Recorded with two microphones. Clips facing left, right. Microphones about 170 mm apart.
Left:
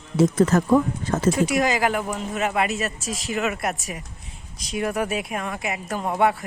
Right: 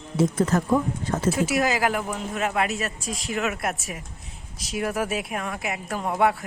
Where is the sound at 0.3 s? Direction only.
85° left.